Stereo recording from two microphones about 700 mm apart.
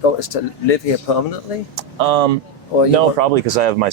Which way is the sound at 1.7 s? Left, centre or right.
Right.